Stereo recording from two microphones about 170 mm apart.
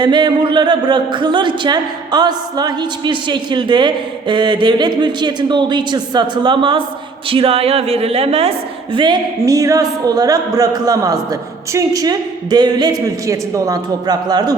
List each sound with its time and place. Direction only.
0.0 s a woman's voice: 25° right (ahead or behind)